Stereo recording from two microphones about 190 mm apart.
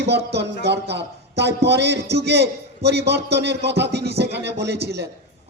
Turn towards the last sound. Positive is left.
turn(degrees=-60)  # may be behind; listen again after turning